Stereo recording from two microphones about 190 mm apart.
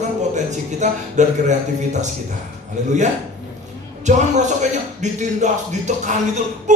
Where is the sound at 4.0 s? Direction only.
40° right (ahead or behind).